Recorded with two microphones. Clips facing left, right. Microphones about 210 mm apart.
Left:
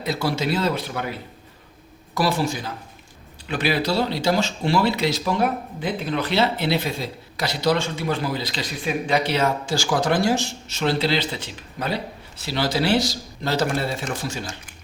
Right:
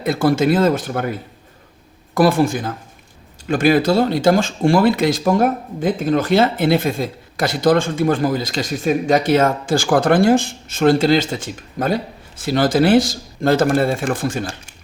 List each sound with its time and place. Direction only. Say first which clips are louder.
0.0 s speech: right 8 dB; 50° right (ahead or behind)
2.1 s speech: right 8 dB; 50° right (ahead or behind)